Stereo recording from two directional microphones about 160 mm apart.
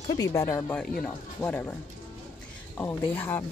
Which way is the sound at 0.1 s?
20° left (ahead or behind).